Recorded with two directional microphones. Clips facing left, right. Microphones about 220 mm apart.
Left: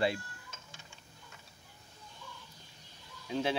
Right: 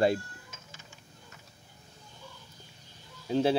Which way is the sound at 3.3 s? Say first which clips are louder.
Right 7 dB; 35° right (ahead or behind).